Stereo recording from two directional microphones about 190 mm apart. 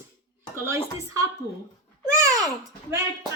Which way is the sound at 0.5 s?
15° right (ahead or behind).